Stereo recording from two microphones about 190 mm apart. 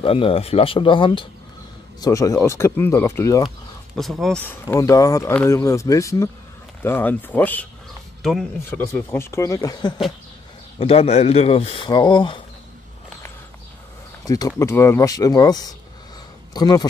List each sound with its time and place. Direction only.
0.0 s speech: 30° left (ahead or behind)
3.4 s speech: centre (ahead or behind); by 9.9 s 20° left (ahead or behind)
10.8 s speech: 30° left (ahead or behind)
14.2 s speech: 20° left (ahead or behind)